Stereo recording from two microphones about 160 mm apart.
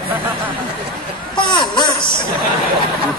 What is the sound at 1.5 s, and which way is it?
Speech, 30° left (ahead or behind).